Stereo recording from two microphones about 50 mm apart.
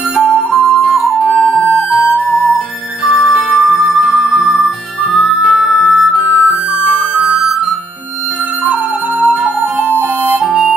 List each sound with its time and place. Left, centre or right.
0.2 s music: centre
3.1 s music: centre
4.0 s music: centre
9.4 s music: right